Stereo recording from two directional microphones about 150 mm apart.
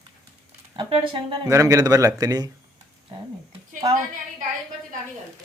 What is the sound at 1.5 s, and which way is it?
Speech, 20° right (ahead or behind).